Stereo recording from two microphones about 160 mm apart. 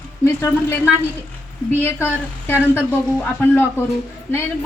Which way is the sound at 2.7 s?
10° left (ahead or behind).